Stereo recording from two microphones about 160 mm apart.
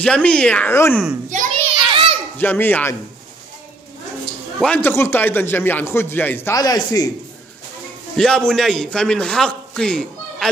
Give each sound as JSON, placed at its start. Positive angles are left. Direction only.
{"t": 0.0, "sound": "a man's voice", "side_deg": 5}
{"t": 1.3, "sound": "a sound", "side_deg": -50}
{"t": 1.8, "sound": "children playing", "side_deg": -35}
{"t": 2.3, "sound": "a man's voice", "side_deg": 10}
{"t": 4.6, "sound": "a man's voice", "side_deg": 5}
{"t": 8.2, "sound": "a man's voice", "side_deg": 5}